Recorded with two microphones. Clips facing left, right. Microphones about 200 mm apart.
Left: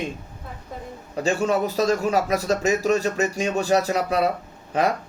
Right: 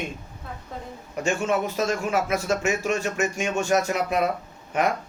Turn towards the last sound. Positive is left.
turn(degrees=35)  # may be behind; listen again after turning